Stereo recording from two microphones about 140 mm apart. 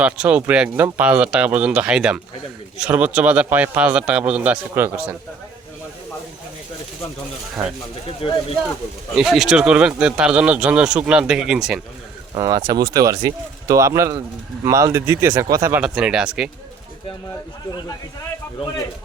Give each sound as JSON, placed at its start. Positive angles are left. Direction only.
{"t": 0.0, "sound": "speech", "side_deg": -10}
{"t": 7.6, "sound": "speech", "side_deg": -5}
{"t": 8.0, "sound": "speech", "side_deg": 45}
{"t": 9.1, "sound": "speech", "side_deg": 0}
{"t": 12.4, "sound": "speech", "side_deg": -25}
{"t": 15.7, "sound": "speech", "side_deg": -5}